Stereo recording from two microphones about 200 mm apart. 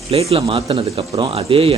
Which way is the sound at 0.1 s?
30° right (ahead or behind).